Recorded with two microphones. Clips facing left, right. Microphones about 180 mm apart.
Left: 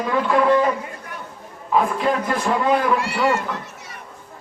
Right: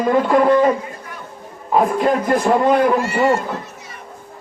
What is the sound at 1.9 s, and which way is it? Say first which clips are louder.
Speech: right 5 dB; 40° right (ahead or behind).